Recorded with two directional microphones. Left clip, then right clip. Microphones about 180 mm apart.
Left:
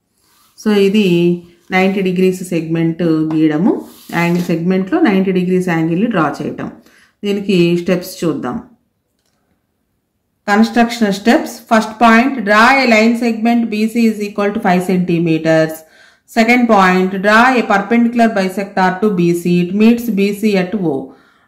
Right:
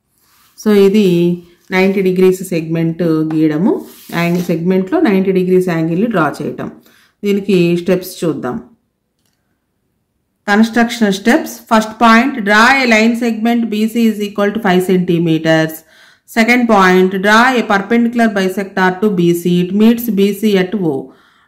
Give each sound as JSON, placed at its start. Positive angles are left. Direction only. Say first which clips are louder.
{"t": 0.7, "sound": "speech", "louder": "right 3 dB", "side_deg": -30}
{"t": 10.7, "sound": "speech", "louder": "even", "side_deg": -30}